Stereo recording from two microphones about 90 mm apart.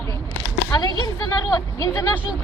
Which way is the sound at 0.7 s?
45° left (ahead or behind).